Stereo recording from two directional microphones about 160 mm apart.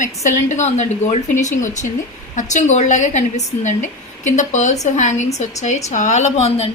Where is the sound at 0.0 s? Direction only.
50° left (ahead or behind).